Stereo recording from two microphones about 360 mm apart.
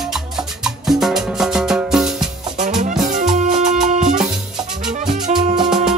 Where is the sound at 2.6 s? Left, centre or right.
Centre.